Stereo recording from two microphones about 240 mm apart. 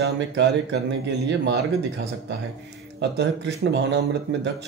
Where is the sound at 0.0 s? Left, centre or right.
Right.